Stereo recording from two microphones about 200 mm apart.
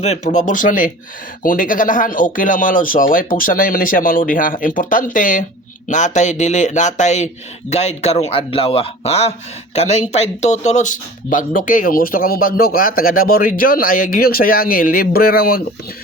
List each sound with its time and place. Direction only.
0.0 s a man's voice: 35° left (ahead or behind)